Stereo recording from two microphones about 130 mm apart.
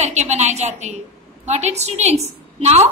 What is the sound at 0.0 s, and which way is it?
A woman's voice, 60° right (ahead or behind).